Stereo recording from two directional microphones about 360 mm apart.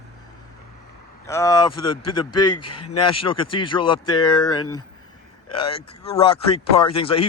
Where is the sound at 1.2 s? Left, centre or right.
Centre.